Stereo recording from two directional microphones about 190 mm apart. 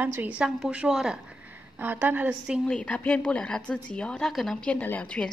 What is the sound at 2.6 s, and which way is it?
A woman's voice, 5° left (ahead or behind).